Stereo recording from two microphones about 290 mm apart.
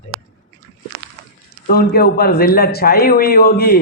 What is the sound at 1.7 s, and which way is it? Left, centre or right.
A man's voice, left.